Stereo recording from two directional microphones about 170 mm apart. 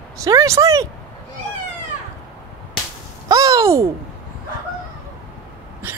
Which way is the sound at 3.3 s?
20° right (ahead or behind).